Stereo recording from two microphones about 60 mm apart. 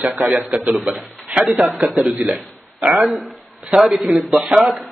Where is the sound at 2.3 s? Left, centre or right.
Right.